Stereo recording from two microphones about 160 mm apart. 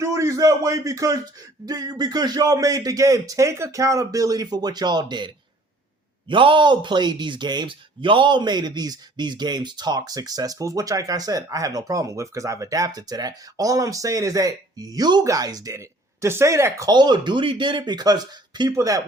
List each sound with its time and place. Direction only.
0.0 s speech: 20° right (ahead or behind)